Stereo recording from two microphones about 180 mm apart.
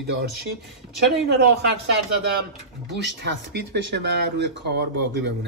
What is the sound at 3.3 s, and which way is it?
Speech, 70° right (ahead or behind).